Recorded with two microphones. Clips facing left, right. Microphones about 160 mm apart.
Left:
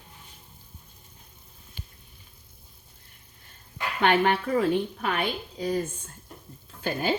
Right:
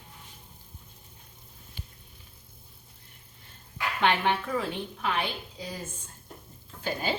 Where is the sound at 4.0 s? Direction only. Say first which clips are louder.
Left 4 dB; 50° left (ahead or behind).